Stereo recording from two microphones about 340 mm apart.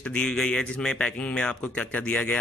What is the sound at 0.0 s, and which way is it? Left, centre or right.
Speech, centre.